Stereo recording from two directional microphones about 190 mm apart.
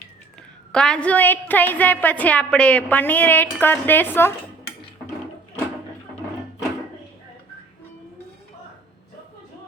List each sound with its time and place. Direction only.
0.7 s a woman's voice: 5° left (ahead or behind)